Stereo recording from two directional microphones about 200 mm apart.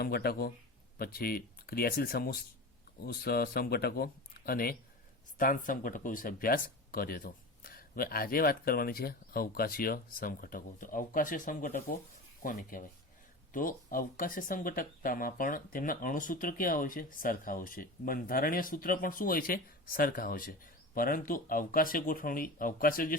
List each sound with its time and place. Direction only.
0.0 s speech: 50° left (ahead or behind)